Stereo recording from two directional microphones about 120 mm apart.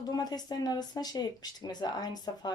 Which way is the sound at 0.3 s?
35° left (ahead or behind).